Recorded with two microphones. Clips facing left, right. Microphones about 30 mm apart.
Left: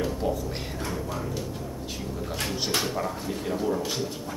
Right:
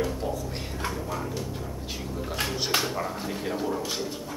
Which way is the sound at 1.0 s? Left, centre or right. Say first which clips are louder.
Even; centre.